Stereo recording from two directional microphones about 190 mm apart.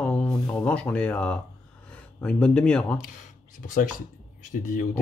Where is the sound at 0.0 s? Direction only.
5° left (ahead or behind).